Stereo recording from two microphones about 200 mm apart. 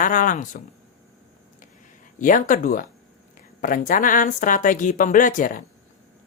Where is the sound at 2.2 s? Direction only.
40° left (ahead or behind).